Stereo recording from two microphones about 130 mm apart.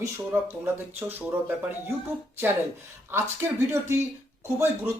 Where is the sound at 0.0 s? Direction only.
20° right (ahead or behind).